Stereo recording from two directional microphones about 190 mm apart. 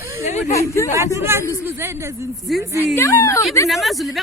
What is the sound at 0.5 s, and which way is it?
Speech, 15° left (ahead or behind).